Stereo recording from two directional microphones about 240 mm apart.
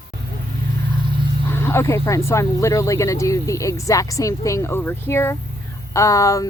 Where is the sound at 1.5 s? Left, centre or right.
Centre.